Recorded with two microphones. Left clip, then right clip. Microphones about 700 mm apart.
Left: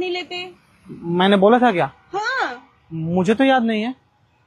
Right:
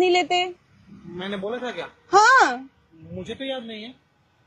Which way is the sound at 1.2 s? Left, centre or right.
Left.